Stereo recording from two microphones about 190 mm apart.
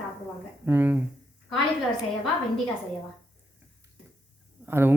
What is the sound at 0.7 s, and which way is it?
Speech, 10° right (ahead or behind).